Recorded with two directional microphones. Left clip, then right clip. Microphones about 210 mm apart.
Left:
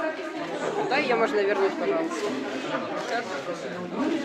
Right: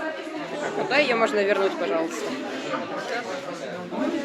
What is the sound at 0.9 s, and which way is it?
Speech, 45° right (ahead or behind).